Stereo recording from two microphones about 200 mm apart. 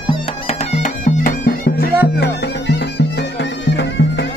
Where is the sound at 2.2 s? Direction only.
55° left (ahead or behind).